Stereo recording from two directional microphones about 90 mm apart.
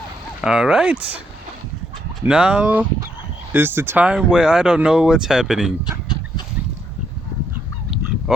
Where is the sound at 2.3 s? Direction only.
10° right (ahead or behind).